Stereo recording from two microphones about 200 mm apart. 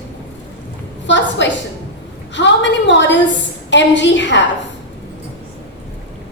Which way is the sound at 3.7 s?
65° left (ahead or behind).